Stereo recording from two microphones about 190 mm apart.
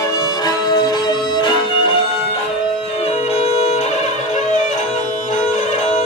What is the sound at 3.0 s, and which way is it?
Music, 30° left (ahead or behind).